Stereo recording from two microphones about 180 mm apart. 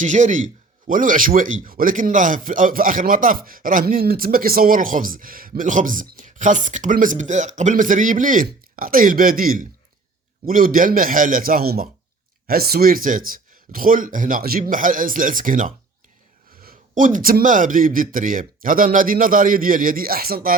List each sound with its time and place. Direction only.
0.0 s speech: 45° right (ahead or behind)